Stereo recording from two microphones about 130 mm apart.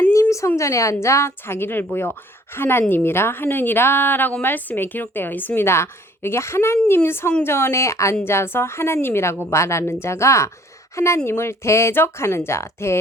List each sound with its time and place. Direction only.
0.1 s a woman's voice: 25° left (ahead or behind)